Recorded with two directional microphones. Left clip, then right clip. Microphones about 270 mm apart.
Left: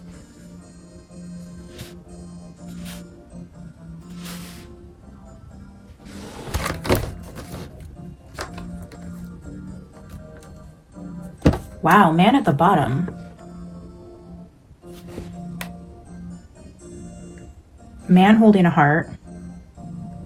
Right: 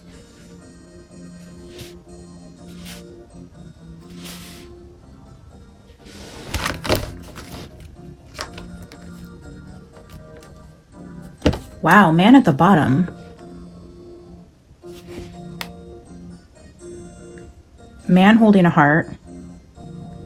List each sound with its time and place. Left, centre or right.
1.4 s music: centre
4.2 s music: centre
6.1 s a sound: centre
11.8 s speech: right
16.8 s music: centre
18.1 s speech: right